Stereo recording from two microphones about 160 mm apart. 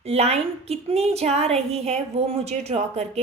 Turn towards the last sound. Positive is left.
turn(degrees=-40)  # may be behind; listen again after turning